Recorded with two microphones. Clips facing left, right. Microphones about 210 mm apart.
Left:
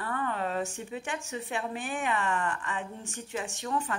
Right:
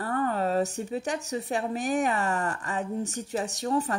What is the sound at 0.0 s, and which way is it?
Speech, 40° right (ahead or behind).